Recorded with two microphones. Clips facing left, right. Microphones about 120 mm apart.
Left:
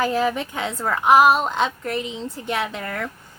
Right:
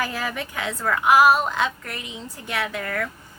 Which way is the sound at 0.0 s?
25° left (ahead or behind).